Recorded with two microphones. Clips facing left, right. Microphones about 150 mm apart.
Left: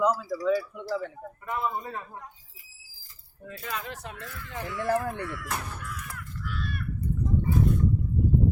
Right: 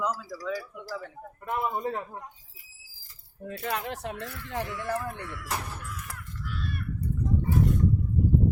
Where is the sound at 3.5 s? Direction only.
65° right (ahead or behind).